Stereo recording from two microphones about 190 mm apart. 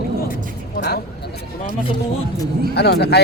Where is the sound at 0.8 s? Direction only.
60° left (ahead or behind).